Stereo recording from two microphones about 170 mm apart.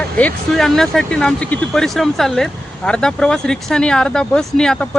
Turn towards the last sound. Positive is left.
turn(degrees=5)  # may be behind; listen again after turning